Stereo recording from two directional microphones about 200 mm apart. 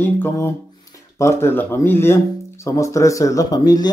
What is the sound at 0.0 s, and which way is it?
Speech, 10° left (ahead or behind).